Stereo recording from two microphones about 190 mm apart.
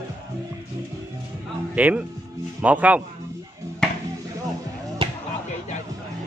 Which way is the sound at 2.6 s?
10° right (ahead or behind).